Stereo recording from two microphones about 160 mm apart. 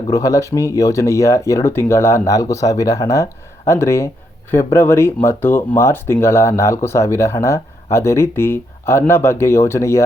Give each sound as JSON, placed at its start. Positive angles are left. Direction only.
{"t": 0.1, "sound": "speech", "side_deg": 20}